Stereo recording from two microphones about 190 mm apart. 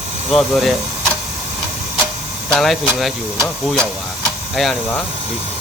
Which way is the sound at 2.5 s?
Centre (ahead or behind).